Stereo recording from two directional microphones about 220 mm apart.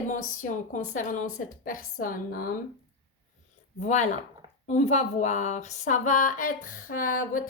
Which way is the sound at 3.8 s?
30° left (ahead or behind).